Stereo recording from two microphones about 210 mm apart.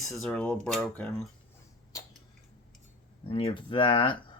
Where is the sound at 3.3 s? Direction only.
25° left (ahead or behind).